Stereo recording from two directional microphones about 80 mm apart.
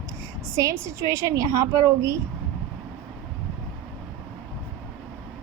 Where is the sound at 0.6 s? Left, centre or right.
Right.